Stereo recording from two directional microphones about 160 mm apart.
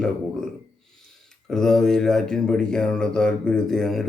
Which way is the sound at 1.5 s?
5° left (ahead or behind).